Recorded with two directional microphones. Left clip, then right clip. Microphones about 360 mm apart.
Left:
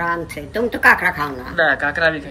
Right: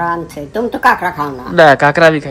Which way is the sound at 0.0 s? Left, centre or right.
Centre.